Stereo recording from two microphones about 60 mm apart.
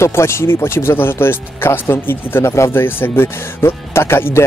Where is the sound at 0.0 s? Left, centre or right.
Left.